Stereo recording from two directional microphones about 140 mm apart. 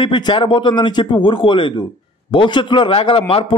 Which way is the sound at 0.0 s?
35° left (ahead or behind).